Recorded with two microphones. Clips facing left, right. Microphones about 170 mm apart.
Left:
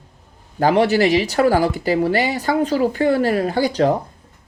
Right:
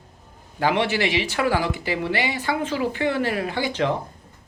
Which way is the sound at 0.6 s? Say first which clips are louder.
Left 7 dB; 40° left (ahead or behind).